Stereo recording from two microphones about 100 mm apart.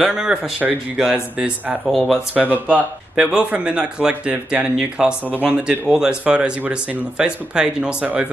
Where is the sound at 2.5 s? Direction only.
15° right (ahead or behind).